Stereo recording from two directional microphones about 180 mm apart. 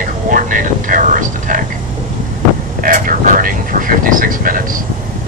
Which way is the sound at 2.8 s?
50° right (ahead or behind).